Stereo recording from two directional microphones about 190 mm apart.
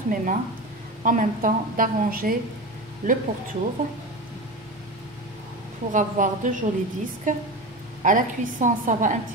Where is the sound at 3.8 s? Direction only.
40° right (ahead or behind).